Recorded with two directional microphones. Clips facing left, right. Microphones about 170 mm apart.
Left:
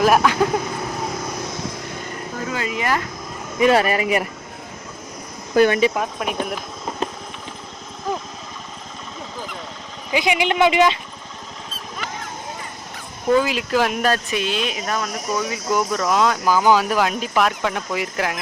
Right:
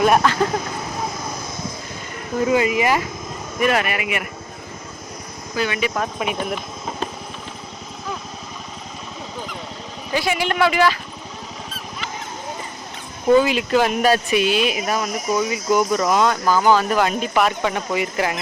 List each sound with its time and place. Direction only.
0.0 s speech: centre (ahead or behind)
2.5 s speech: 15° right (ahead or behind)
3.6 s speech: 30° left (ahead or behind)
5.5 s speech: 50° left (ahead or behind)
6.1 s speech: centre (ahead or behind)
10.1 s speech: 15° left (ahead or behind)
13.2 s speech: centre (ahead or behind)
16.4 s speech: 10° left (ahead or behind)